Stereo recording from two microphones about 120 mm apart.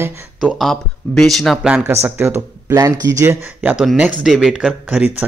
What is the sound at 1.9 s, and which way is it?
Speech, 20° right (ahead or behind).